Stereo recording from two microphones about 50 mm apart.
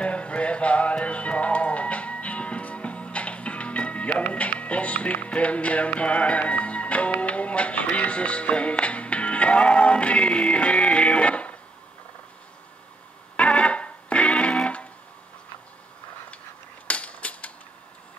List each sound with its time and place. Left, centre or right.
0.0 s music: left
13.4 s music: left
16.8 s a sound: left